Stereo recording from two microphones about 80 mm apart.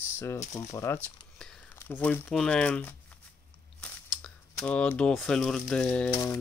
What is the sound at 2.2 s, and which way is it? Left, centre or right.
Speech, centre.